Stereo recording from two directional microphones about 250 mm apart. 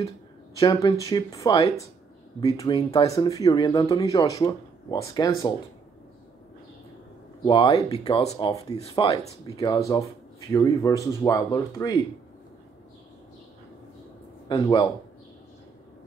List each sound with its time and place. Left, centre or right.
0.6 s speech: centre
7.4 s speech: centre
14.5 s speech: centre